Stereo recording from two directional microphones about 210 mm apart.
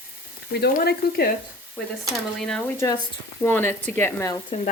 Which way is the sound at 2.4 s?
5° left (ahead or behind).